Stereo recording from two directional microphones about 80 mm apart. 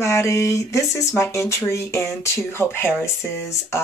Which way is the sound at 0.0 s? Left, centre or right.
Left.